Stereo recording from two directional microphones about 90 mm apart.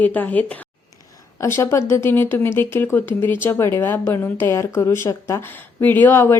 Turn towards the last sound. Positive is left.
turn(degrees=25)  # may be behind; listen again after turning